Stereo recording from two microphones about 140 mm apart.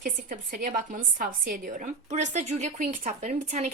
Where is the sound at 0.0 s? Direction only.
70° right (ahead or behind).